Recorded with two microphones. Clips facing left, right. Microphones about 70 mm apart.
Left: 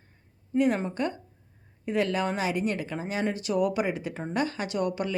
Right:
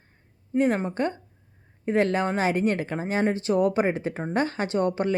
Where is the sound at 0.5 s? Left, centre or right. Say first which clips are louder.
Right 2 dB; right.